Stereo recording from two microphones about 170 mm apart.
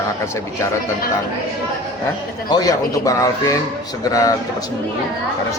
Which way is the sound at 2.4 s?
25° left (ahead or behind).